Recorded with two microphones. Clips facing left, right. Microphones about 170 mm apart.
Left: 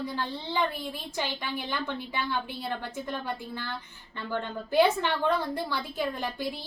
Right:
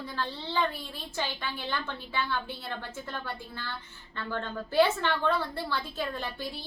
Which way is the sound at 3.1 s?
15° left (ahead or behind).